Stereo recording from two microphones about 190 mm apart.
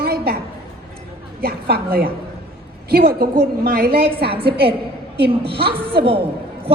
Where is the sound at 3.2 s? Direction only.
55° right (ahead or behind).